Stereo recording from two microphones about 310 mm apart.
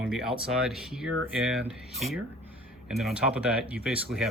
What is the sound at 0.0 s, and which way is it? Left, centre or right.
Speech, centre.